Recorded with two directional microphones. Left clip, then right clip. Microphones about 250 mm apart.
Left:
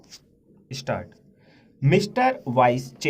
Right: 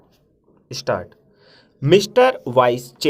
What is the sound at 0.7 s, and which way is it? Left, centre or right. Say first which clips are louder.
Speech: right 7 dB; right.